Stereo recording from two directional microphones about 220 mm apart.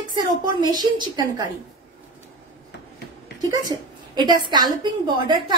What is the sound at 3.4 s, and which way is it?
A woman's voice, 15° right (ahead or behind).